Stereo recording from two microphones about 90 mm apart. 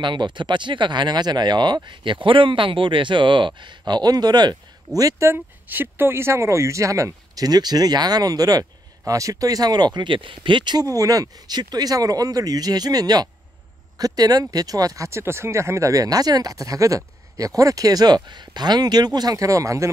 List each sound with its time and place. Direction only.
0.0 s speech: 60° right (ahead or behind); by 5.3 s 40° right (ahead or behind)
5.3 s speech: 25° right (ahead or behind)